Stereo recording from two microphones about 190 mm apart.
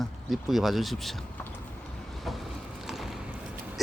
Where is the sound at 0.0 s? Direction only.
Centre (ahead or behind).